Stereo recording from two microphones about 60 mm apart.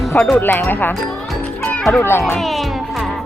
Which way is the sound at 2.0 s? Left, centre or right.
Left.